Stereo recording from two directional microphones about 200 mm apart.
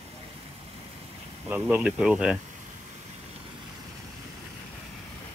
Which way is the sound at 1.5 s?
5° right (ahead or behind).